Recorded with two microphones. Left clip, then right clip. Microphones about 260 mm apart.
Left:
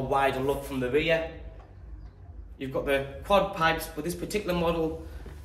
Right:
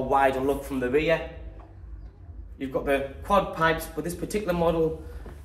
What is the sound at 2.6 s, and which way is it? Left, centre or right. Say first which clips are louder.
Speech: right 2 dB; centre.